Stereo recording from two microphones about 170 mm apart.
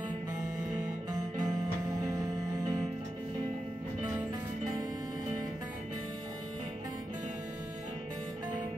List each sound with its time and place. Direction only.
1.4 s music: 20° right (ahead or behind)